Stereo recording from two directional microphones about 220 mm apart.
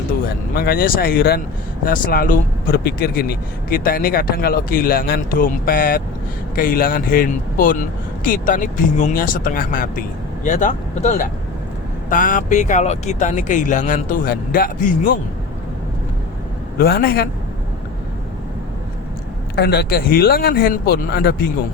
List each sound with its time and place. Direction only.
0.5 s speech: 45° left (ahead or behind)
16.7 s speech: 45° left (ahead or behind)
19.5 s speech: 45° left (ahead or behind)